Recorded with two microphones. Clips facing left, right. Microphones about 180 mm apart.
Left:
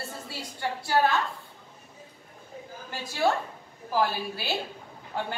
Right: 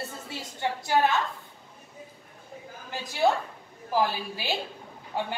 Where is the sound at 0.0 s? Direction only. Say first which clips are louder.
Right 1 dB; 20° right (ahead or behind).